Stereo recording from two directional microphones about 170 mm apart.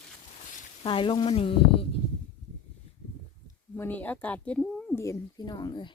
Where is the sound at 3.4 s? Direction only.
15° left (ahead or behind).